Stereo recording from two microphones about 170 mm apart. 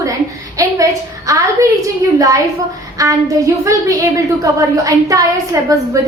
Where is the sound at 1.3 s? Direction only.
20° right (ahead or behind).